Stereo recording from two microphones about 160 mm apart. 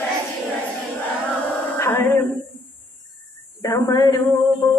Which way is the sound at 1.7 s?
15° left (ahead or behind).